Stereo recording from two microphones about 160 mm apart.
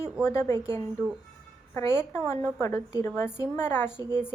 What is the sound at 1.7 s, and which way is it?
A woman's voice, 15° left (ahead or behind).